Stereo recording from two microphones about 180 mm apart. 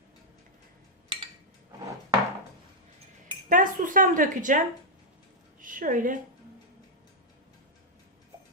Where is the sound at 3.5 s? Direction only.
50° right (ahead or behind).